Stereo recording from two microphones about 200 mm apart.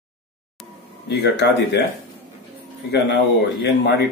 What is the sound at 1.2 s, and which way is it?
Speech, 55° left (ahead or behind).